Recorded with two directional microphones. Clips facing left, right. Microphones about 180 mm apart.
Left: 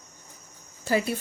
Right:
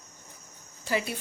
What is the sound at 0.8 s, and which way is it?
Speech, 45° left (ahead or behind).